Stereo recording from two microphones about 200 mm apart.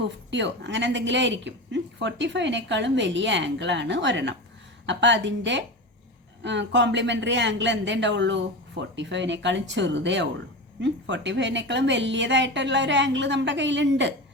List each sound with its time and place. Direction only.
0.3 s speech: 60° right (ahead or behind)